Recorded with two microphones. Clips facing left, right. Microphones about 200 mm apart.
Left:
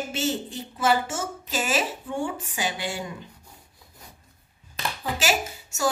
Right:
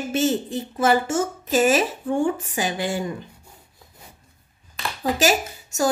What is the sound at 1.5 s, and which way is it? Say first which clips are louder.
A woman's voice: right 8 dB; 50° right (ahead or behind).